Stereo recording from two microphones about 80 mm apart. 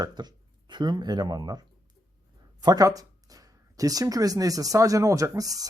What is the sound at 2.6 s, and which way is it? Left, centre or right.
Speech, right.